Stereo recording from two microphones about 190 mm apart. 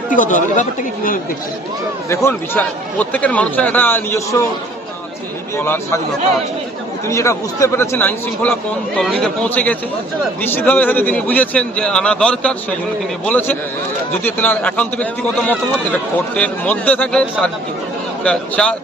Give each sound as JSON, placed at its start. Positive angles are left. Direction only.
{"t": 0.1, "sound": "speech", "side_deg": 45}
{"t": 2.0, "sound": "speech", "side_deg": 10}
{"t": 5.5, "sound": "speech", "side_deg": 10}
{"t": 7.1, "sound": "speech", "side_deg": 15}